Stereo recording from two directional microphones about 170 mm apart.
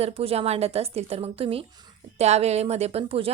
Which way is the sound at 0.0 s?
35° right (ahead or behind).